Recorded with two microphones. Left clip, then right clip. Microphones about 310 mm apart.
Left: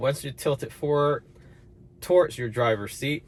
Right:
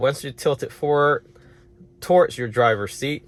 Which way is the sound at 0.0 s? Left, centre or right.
Right.